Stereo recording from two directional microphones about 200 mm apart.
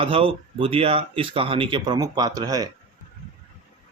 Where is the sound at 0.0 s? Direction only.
25° right (ahead or behind).